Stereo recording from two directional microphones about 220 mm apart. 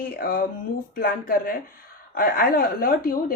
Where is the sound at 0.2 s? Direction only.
40° left (ahead or behind).